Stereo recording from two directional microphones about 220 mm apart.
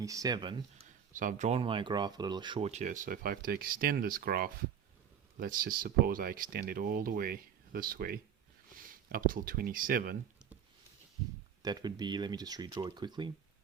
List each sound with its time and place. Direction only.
0.0 s speech: 15° right (ahead or behind)
1.1 s speech: 35° right (ahead or behind)
11.6 s speech: 20° right (ahead or behind)